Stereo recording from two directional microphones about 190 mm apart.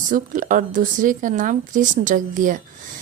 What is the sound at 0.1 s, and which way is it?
A woman's voice, 45° right (ahead or behind).